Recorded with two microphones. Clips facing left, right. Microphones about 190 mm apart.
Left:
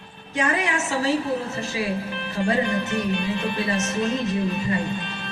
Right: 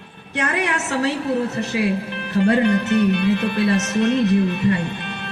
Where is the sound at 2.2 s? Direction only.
65° right (ahead or behind).